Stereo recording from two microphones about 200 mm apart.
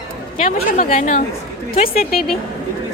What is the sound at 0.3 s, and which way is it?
A woman's voice, 40° left (ahead or behind).